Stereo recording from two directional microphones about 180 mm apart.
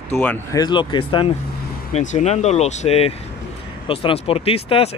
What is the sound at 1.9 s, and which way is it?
Speech, 40° left (ahead or behind).